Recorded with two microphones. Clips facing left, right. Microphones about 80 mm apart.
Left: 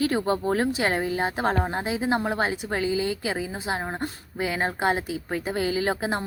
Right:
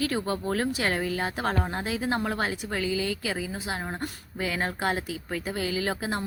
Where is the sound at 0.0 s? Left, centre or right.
Left.